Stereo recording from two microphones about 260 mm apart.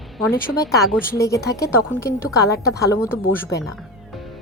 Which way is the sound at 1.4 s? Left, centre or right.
Centre.